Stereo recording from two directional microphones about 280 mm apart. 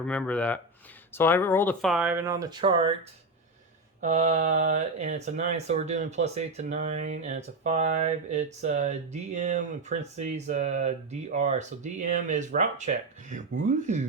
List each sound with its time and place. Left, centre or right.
0.0 s speech: centre
4.0 s speech: right